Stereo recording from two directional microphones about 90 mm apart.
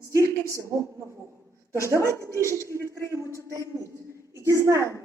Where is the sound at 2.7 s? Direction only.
30° left (ahead or behind).